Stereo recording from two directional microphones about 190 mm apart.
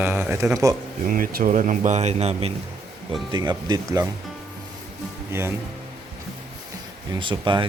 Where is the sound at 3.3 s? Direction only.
20° right (ahead or behind).